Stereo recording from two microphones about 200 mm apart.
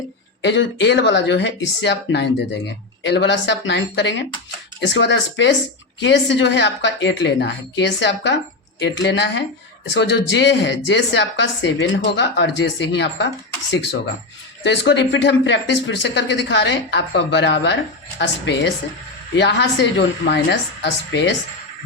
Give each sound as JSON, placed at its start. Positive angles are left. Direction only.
{"t": 0.4, "sound": "speech", "side_deg": 60}
{"t": 14.6, "sound": "speech", "side_deg": 60}